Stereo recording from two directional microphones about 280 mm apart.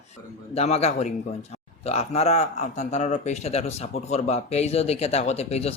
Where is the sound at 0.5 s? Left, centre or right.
Left.